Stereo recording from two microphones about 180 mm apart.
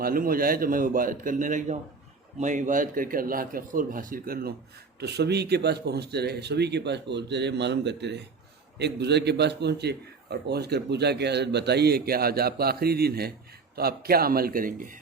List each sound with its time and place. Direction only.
0.0 s a man's voice: 50° right (ahead or behind)
4.9 s a man's voice: 65° right (ahead or behind); by 14.9 s 50° right (ahead or behind)